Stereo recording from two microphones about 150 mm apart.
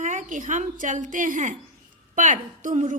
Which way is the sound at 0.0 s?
55° right (ahead or behind).